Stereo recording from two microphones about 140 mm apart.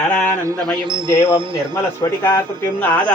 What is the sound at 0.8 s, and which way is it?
Speech, 35° right (ahead or behind).